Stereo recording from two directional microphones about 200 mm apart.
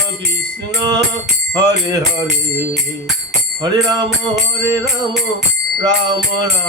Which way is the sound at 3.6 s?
20° right (ahead or behind).